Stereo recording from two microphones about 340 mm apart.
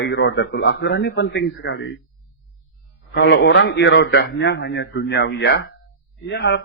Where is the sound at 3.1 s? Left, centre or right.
Left.